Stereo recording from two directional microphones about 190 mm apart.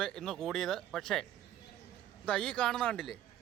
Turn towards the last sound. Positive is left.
turn(degrees=5)  # may be behind; listen again after turning